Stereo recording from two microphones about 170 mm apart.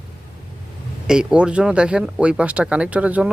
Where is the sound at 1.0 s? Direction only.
5° right (ahead or behind).